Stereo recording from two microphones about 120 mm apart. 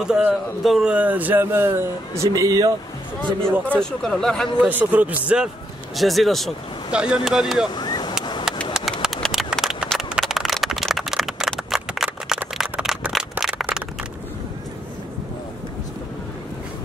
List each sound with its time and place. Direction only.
0.0 s speech: 5° right (ahead or behind); by 3.5 s 40° right (ahead or behind)
3.6 s speech: 10° left (ahead or behind)
4.6 s speech: 15° right (ahead or behind)
5.9 s speech: centre (ahead or behind)
7.7 s boat: 35° left (ahead or behind)
8.2 s a sound: 40° left (ahead or behind)
9.0 s a sound: centre (ahead or behind)